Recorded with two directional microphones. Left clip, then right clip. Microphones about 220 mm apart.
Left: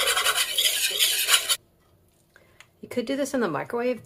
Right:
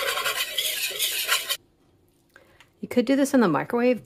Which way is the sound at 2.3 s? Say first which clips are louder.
Right 2 dB; 35° right (ahead or behind).